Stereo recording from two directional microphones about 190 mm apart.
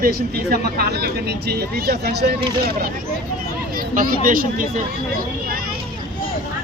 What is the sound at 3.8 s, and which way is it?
Speech, 50° right (ahead or behind).